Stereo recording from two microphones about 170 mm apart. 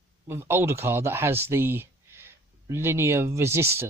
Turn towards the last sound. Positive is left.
turn(degrees=-15)  # may be behind; listen again after turning